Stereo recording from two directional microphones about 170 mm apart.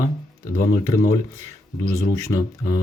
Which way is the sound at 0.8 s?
20° left (ahead or behind).